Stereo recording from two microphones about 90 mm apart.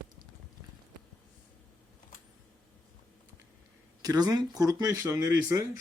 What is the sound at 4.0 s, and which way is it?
Speech, 45° right (ahead or behind).